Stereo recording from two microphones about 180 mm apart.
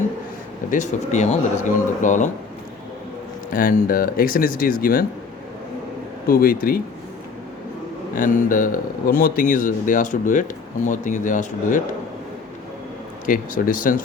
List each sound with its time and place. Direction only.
0.7 s speech: 40° left (ahead or behind)
3.5 s speech: 50° left (ahead or behind)
6.2 s speech: 55° left (ahead or behind)
8.1 s speech: 50° left (ahead or behind)
13.2 s speech: 50° left (ahead or behind)